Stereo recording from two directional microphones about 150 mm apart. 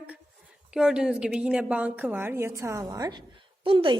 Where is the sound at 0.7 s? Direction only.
5° right (ahead or behind).